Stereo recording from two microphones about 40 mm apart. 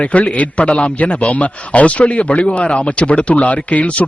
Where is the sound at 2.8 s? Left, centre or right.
Left.